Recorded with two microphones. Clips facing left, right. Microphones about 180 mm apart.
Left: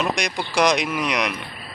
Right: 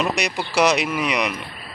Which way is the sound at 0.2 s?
5° right (ahead or behind).